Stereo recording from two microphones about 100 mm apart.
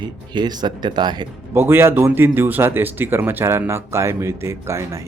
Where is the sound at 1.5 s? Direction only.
25° right (ahead or behind).